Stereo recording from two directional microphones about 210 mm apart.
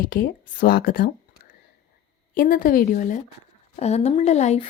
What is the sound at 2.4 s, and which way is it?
Speech, 40° left (ahead or behind).